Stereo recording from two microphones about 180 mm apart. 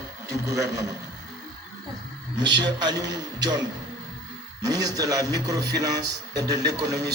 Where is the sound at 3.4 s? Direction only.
20° right (ahead or behind).